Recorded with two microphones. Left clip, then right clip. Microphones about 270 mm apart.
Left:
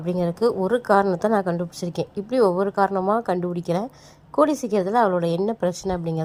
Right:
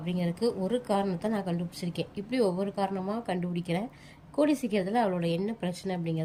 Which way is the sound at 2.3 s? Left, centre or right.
Left.